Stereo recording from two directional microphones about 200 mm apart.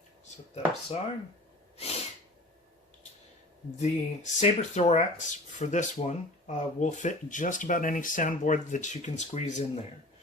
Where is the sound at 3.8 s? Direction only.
35° left (ahead or behind).